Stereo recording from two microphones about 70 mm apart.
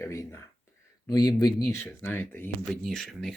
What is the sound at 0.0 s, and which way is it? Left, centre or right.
Speech, left.